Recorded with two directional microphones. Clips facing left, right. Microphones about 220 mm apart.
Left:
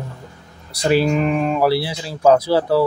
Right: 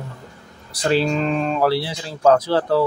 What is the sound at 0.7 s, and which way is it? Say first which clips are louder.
Speech: left 3 dB; 10° left (ahead or behind).